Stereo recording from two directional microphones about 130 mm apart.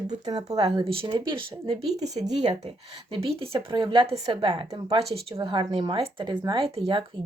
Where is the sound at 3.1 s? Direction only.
45° right (ahead or behind).